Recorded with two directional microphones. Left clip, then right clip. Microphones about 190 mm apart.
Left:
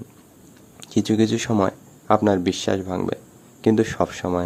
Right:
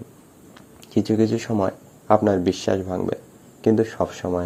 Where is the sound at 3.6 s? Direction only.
15° left (ahead or behind).